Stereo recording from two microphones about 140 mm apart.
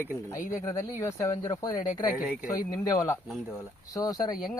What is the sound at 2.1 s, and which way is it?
Speech, 10° right (ahead or behind).